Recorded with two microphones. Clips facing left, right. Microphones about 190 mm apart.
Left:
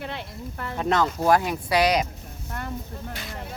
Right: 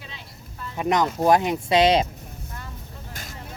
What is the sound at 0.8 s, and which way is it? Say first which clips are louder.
Speech: right 2 dB; 15° right (ahead or behind).